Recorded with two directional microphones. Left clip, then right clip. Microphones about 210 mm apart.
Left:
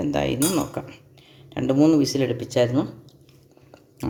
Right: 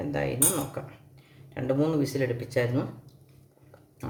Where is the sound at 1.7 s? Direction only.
30° left (ahead or behind).